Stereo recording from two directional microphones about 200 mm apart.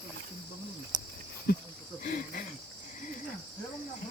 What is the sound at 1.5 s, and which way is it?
Cricket, 50° left (ahead or behind).